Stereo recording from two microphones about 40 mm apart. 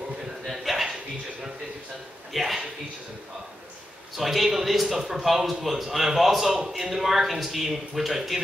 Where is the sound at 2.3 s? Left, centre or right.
Centre.